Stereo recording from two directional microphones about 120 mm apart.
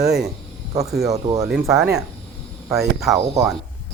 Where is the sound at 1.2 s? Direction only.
30° right (ahead or behind).